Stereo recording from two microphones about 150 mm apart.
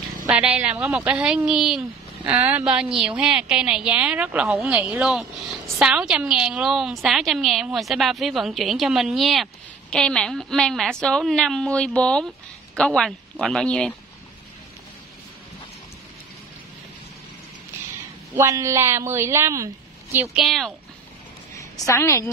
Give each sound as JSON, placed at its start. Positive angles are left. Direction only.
{"t": 0.3, "sound": "a woman's voice", "side_deg": -10}
{"t": 18.3, "sound": "a woman's voice", "side_deg": -20}
{"t": 20.4, "sound": "a woman's voice", "side_deg": 0}
{"t": 21.5, "sound": "a woman's voice", "side_deg": 20}